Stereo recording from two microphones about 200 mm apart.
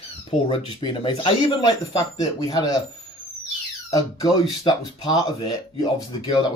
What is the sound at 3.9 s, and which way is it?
Speech, 20° left (ahead or behind).